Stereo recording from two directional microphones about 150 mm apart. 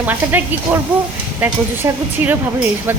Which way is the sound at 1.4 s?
10° right (ahead or behind).